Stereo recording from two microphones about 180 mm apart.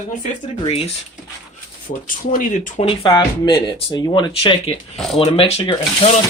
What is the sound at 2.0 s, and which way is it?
Speech, 50° left (ahead or behind).